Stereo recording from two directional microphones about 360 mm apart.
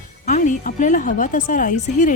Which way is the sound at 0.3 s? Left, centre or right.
Left.